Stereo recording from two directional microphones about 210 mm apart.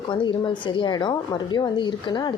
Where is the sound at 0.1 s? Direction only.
20° left (ahead or behind).